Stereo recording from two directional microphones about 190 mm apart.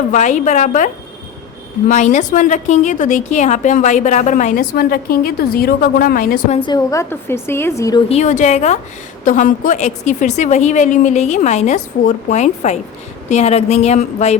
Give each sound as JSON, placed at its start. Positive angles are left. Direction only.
{"t": 0.1, "sound": "a woman's voice", "side_deg": 40}
{"t": 1.9, "sound": "a woman's voice", "side_deg": 40}
{"t": 6.5, "sound": "a woman's voice", "side_deg": 25}
{"t": 8.1, "sound": "a woman's voice", "side_deg": 40}